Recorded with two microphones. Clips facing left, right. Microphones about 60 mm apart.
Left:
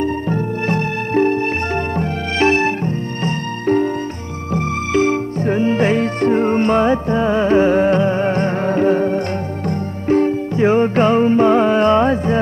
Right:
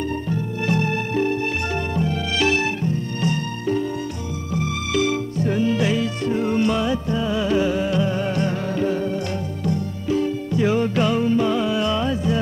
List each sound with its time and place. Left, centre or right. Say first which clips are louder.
0.3 s music: left 4 dB; left